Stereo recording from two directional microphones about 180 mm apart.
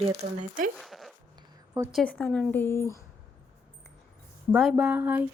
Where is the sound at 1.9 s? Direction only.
5° left (ahead or behind).